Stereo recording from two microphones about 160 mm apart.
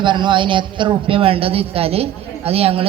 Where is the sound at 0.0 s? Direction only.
30° right (ahead or behind).